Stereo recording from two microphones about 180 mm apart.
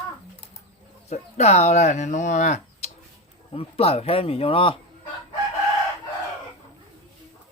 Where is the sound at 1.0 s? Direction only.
35° left (ahead or behind).